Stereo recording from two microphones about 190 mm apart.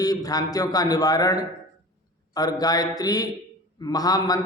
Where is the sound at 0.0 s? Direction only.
20° left (ahead or behind).